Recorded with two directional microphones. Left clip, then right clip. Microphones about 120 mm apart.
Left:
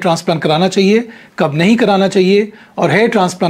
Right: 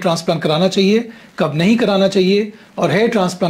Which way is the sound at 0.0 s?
35° left (ahead or behind).